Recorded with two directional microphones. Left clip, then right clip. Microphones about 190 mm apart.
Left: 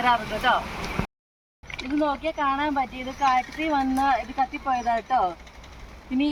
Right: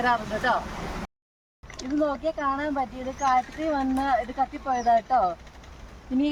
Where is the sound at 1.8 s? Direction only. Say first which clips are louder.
Left 1 dB; 25° right (ahead or behind).